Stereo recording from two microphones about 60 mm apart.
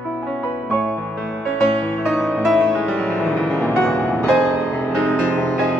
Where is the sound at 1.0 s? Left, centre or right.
Centre.